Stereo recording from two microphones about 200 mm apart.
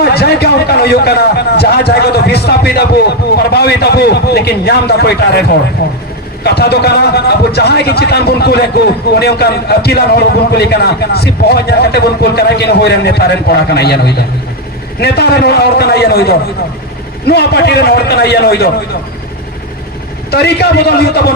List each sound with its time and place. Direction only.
0.0 s a man's voice: 55° left (ahead or behind)
20.3 s a man's voice: 55° left (ahead or behind)